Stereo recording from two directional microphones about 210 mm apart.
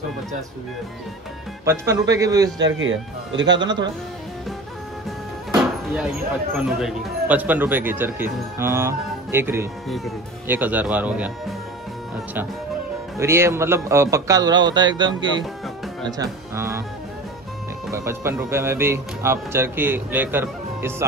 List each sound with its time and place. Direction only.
1.6 s speech: 15° right (ahead or behind)
2.8 s speech: 65° right (ahead or behind)
5.6 s speech: 5° right (ahead or behind)
9.8 s speech: centre (ahead or behind)
13.2 s speech: 10° right (ahead or behind)
17.9 s speech: 10° right (ahead or behind)